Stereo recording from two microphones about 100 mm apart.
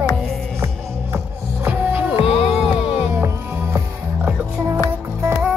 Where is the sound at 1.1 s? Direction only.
20° right (ahead or behind).